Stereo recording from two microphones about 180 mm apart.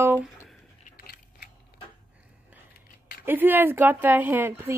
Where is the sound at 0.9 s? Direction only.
55° left (ahead or behind).